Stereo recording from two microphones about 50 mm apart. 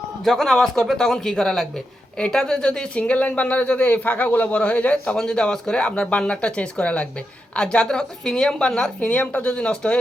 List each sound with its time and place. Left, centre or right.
0.3 s speech: centre
2.1 s speech: centre; by 4.4 s left
4.5 s speech: left
5.1 s speech: centre
9.0 s speech: left
9.5 s speech: left